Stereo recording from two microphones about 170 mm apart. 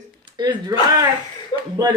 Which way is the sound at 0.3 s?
25° right (ahead or behind).